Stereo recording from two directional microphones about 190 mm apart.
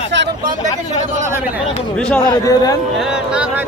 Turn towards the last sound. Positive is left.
turn(degrees=-5)  # may be behind; listen again after turning